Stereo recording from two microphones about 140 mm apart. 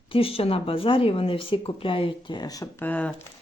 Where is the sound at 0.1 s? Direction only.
40° left (ahead or behind); by 2.8 s 25° left (ahead or behind).